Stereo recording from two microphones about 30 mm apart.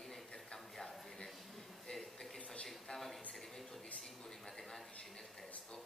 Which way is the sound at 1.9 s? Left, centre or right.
Centre.